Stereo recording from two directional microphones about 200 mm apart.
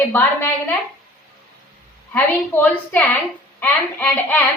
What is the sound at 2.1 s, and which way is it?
A woman's voice, 10° left (ahead or behind).